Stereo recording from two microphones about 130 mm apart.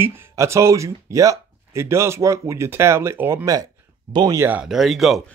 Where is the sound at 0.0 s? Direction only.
20° right (ahead or behind).